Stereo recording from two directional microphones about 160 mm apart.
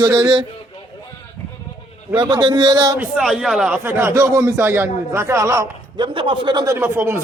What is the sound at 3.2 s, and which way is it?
Speech, centre (ahead or behind).